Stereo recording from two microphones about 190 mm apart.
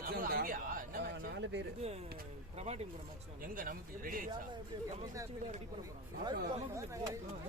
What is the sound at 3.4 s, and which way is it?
Speech, 45° right (ahead or behind).